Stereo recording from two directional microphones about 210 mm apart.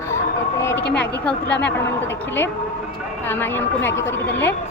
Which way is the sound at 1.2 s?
5° left (ahead or behind).